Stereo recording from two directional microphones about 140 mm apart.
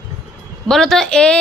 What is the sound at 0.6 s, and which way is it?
Speech, 5° left (ahead or behind).